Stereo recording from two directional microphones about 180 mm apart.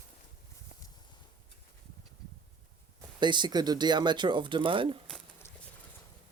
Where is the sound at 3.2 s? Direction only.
25° right (ahead or behind).